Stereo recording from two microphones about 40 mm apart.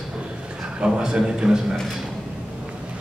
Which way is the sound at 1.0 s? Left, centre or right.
Centre.